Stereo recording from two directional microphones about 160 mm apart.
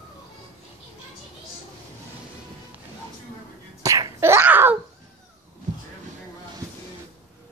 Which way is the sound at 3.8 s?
20° right (ahead or behind).